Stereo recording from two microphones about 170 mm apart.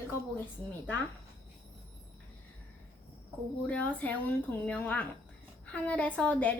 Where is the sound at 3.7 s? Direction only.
10° left (ahead or behind).